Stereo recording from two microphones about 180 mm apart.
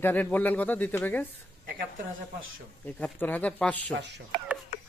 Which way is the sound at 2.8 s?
10° left (ahead or behind).